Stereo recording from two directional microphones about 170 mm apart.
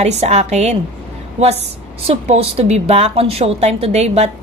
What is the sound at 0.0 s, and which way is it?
A woman's voice, 40° right (ahead or behind).